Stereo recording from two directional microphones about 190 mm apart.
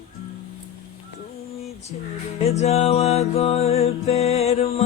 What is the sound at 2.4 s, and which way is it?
Music, 35° left (ahead or behind).